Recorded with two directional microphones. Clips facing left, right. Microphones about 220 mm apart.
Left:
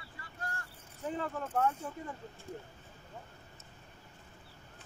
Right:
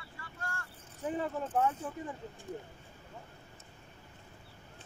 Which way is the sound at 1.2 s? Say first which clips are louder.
Right 1 dB; 10° right (ahead or behind).